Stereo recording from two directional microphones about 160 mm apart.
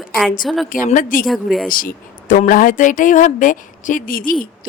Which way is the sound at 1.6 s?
60° left (ahead or behind).